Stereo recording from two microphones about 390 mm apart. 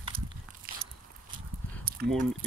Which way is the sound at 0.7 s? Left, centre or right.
Right.